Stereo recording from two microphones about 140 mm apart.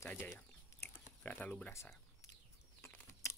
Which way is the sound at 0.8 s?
10° left (ahead or behind).